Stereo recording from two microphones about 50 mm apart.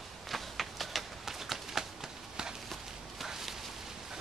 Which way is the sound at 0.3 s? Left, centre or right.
Centre.